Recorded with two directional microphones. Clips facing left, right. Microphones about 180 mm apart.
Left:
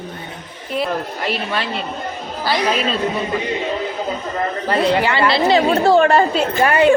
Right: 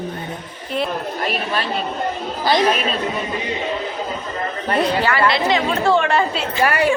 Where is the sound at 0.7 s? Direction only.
5° left (ahead or behind).